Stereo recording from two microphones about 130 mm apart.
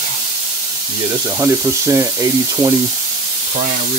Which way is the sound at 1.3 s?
20° right (ahead or behind).